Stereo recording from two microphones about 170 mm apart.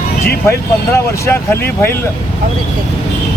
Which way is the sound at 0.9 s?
15° left (ahead or behind).